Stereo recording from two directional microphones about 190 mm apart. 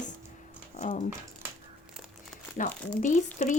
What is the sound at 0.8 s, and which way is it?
Speech, 40° left (ahead or behind).